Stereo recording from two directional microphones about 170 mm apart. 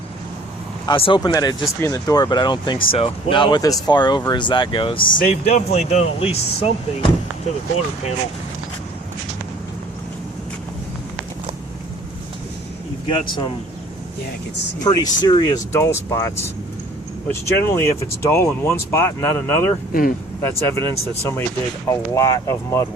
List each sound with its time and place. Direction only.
0.9 s speech: 30° left (ahead or behind)
5.1 s speech: 55° left (ahead or behind)
5.7 s speech: 40° left (ahead or behind)
13.1 s speech: 25° left (ahead or behind)
14.8 s speech: 25° left (ahead or behind)
19.9 s speech: 55° left (ahead or behind)
20.4 s speech: 15° left (ahead or behind)
21.8 s speech: 15° left (ahead or behind)